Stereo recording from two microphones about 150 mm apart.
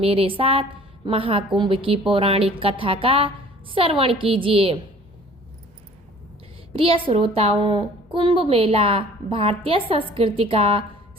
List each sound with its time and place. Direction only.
0.0 s a woman's voice: 40° right (ahead or behind)
6.7 s a woman's voice: 35° right (ahead or behind)